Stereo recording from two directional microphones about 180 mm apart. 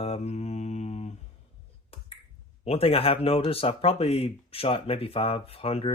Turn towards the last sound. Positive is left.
turn(degrees=30)  # may be behind; listen again after turning